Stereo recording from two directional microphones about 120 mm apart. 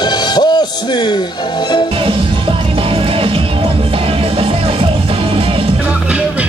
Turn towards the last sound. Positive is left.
turn(degrees=-50)  # may be behind; listen again after turning